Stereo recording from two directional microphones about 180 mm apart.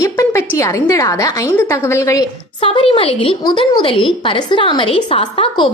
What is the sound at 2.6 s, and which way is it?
A woman's voice, 30° left (ahead or behind).